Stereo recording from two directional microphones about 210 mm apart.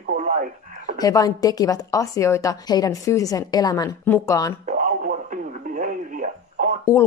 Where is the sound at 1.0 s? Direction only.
15° left (ahead or behind).